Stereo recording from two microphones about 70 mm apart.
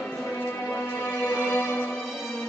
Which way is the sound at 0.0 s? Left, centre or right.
Left.